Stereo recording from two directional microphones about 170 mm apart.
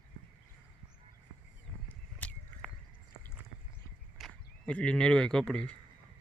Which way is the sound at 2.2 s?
10° left (ahead or behind).